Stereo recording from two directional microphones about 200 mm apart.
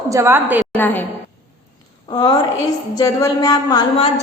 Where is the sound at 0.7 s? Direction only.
10° left (ahead or behind).